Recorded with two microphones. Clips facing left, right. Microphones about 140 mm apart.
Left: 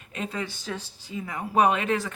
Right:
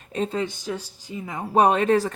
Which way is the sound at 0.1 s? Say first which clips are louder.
Right 7 dB; 30° right (ahead or behind).